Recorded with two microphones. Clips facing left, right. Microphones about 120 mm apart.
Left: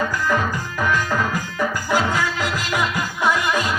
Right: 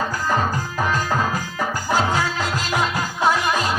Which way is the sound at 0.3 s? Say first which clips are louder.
Even; 30° right (ahead or behind).